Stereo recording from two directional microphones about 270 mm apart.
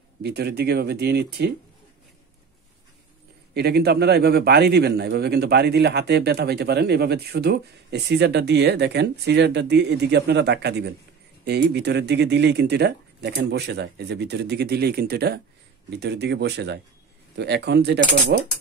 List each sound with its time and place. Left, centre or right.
0.2 s a man's voice: right
3.5 s a man's voice: right